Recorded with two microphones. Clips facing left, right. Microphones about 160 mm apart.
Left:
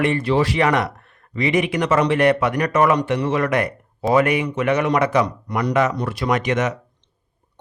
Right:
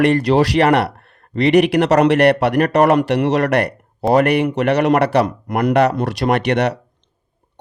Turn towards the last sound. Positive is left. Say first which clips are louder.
# right 4 dB
turn(degrees=-70)  # may be behind; listen again after turning